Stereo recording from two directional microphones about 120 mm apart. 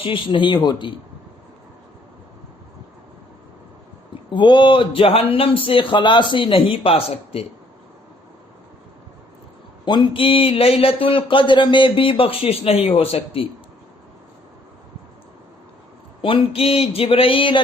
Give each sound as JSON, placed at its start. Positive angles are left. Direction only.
{"t": 0.0, "sound": "speech", "side_deg": 45}
{"t": 4.3, "sound": "speech", "side_deg": 40}
{"t": 9.8, "sound": "speech", "side_deg": 40}
{"t": 16.2, "sound": "speech", "side_deg": 50}